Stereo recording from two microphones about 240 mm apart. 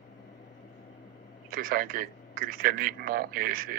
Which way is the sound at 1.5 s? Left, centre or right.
Right.